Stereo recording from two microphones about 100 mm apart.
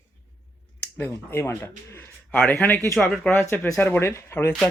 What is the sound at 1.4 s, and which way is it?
Speech, 25° left (ahead or behind).